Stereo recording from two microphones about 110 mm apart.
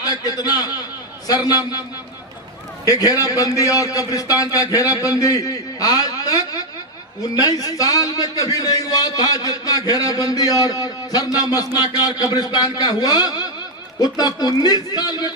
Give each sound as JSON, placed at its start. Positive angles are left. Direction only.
{"t": 0.0, "sound": "a man's voice", "side_deg": 35}
{"t": 2.8, "sound": "a man's voice", "side_deg": 35}